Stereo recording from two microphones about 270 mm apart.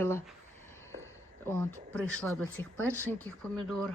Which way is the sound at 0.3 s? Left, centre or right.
Centre.